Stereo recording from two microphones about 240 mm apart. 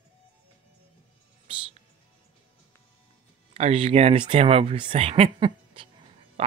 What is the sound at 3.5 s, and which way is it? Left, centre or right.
Speech, right.